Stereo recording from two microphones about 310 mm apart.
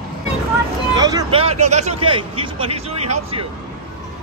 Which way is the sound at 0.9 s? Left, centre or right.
Centre.